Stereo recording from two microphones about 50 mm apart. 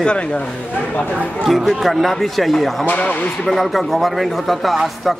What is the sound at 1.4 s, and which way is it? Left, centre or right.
Speech, centre.